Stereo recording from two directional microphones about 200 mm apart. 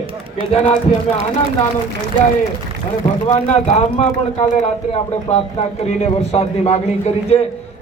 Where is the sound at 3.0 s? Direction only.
30° left (ahead or behind).